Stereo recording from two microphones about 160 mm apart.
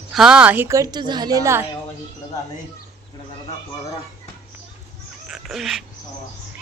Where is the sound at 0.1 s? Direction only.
5° right (ahead or behind); by 1.6 s 20° right (ahead or behind).